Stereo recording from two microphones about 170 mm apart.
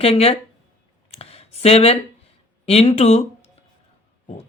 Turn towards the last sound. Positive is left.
turn(degrees=35)  # may be behind; listen again after turning